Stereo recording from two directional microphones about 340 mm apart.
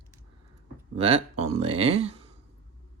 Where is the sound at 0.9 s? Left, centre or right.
Centre.